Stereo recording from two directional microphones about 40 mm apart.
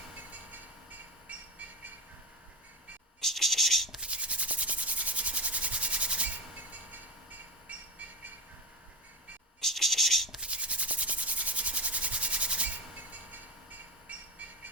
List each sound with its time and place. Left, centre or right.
0.3 s train: right
3.2 s scratch: centre
4.0 s rub: right
9.6 s scratch: centre
10.4 s rub: right